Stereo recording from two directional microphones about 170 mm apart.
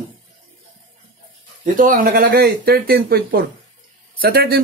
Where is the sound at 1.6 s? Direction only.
50° right (ahead or behind).